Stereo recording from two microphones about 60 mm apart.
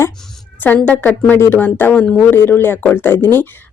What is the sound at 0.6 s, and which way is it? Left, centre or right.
A woman's voice, left.